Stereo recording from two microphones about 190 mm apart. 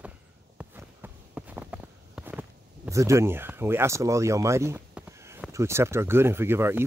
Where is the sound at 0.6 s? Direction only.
10° right (ahead or behind).